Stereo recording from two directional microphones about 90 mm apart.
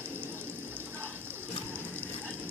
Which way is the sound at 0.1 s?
25° right (ahead or behind).